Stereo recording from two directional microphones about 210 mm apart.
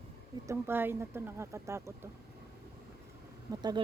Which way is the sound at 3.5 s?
20° right (ahead or behind).